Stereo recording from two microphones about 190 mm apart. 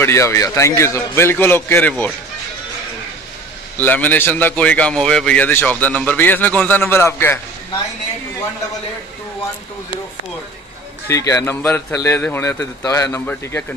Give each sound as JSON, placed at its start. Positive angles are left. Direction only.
{"t": 0.0, "sound": "a man's voice", "side_deg": 15}
{"t": 3.7, "sound": "a man's voice", "side_deg": 10}
{"t": 11.1, "sound": "a man's voice", "side_deg": 15}